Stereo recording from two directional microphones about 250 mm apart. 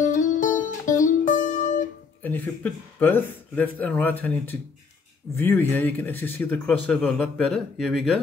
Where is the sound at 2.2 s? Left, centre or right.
Centre.